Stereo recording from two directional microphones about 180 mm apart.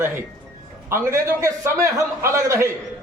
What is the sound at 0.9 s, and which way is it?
A man's voice, 15° right (ahead or behind).